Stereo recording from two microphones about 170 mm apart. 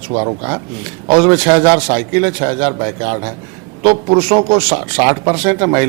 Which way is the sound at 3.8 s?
35° right (ahead or behind).